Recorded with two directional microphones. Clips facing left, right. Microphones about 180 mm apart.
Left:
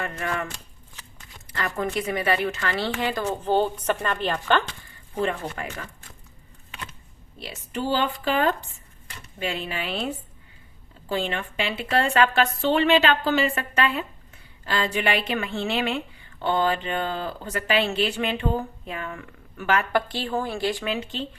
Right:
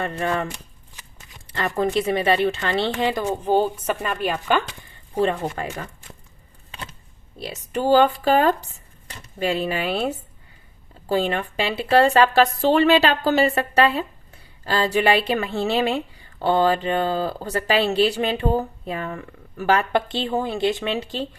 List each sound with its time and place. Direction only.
0.0 s a woman's voice: 30° right (ahead or behind)
1.5 s a woman's voice: 30° right (ahead or behind)
3.2 s a woman's voice: 10° right (ahead or behind)
5.2 s a woman's voice: 30° right (ahead or behind)
7.3 s a woman's voice: 45° right (ahead or behind)